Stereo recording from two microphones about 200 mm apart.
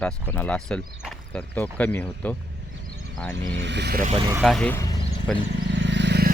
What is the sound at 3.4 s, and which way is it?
Speech, 65° right (ahead or behind).